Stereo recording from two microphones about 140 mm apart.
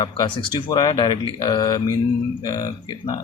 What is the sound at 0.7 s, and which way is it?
Speech, 30° left (ahead or behind).